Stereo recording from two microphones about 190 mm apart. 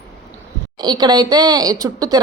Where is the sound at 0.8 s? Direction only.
20° right (ahead or behind).